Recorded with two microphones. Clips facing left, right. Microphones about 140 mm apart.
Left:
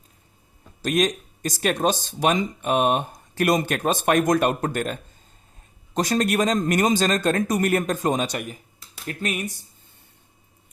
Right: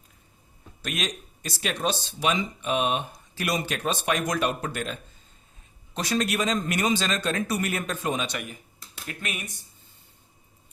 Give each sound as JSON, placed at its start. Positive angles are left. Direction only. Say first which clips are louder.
{"t": 0.8, "sound": "speech", "louder": "left 10 dB", "side_deg": 40}